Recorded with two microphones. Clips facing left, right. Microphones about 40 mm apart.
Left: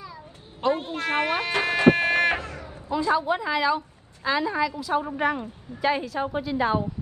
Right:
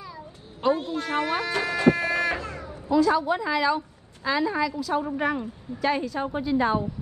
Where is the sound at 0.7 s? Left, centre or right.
Left.